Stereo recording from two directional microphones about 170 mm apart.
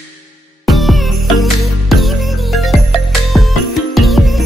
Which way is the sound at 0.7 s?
Centre (ahead or behind).